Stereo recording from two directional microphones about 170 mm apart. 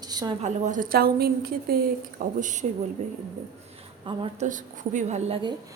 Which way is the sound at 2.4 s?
50° right (ahead or behind).